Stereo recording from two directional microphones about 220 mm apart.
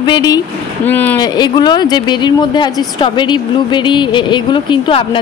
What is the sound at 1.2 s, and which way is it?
Speech, 20° left (ahead or behind).